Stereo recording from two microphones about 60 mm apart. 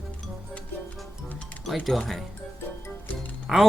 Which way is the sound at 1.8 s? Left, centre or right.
Centre.